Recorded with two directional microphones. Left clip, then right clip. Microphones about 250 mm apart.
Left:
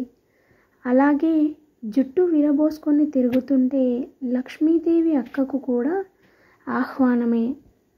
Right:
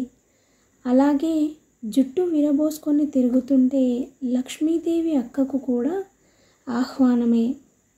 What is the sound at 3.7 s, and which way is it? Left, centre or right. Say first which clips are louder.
Speech: even; left.